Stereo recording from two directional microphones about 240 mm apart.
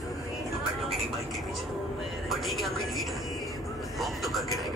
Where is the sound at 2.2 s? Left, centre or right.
Centre.